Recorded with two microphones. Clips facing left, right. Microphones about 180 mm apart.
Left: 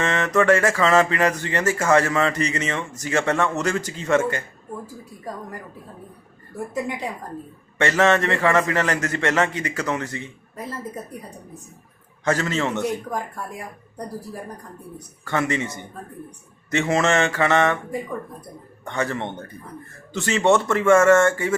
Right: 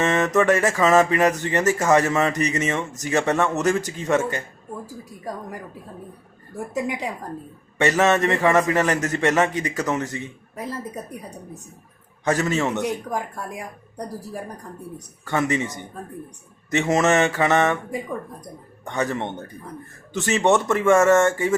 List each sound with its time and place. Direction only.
0.0 s mantra: 20° right (ahead or behind)
0.3 s speech: 20° right (ahead or behind)
6.7 s speech: 15° right (ahead or behind)
12.2 s speech: 15° right (ahead or behind)
15.2 s speech: 15° right (ahead or behind)
18.9 s speech: 15° right (ahead or behind)